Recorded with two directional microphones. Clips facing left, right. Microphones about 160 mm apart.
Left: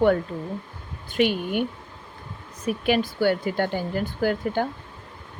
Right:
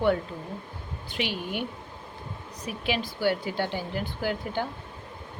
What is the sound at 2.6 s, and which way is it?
Speech, 50° left (ahead or behind).